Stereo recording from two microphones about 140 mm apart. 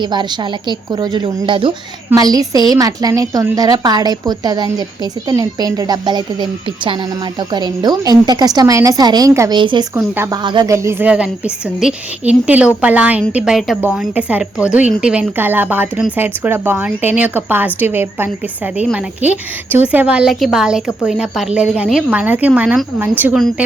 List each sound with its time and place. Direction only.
0.0 s a woman's voice: 35° right (ahead or behind)
2.1 s a woman's voice: 25° right (ahead or behind)
9.6 s a woman's voice: 35° right (ahead or behind)
10.7 s a woman's voice: 20° right (ahead or behind)